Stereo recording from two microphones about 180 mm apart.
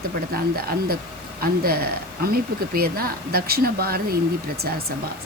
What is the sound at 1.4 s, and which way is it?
Speech, 55° right (ahead or behind).